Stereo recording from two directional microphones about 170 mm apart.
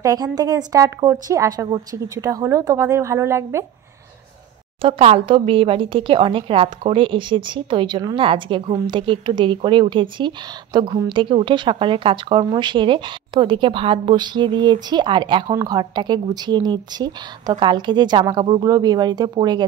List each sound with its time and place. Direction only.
0.0 s speech: 20° right (ahead or behind)
4.8 s speech: 35° right (ahead or behind)